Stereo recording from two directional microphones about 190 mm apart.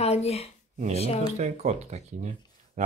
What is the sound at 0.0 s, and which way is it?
Speech, 35° left (ahead or behind).